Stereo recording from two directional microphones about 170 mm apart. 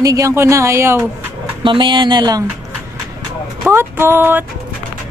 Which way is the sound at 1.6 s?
30° right (ahead or behind).